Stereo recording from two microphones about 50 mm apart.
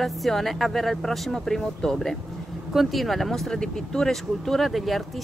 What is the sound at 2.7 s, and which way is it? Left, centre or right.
Speech, centre.